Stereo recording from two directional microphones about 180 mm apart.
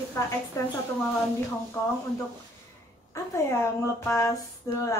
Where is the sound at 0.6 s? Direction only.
20° left (ahead or behind).